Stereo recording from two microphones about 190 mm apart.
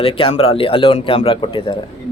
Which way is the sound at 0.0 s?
30° left (ahead or behind).